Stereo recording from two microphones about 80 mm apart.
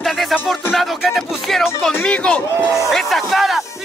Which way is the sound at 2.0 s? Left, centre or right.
Centre.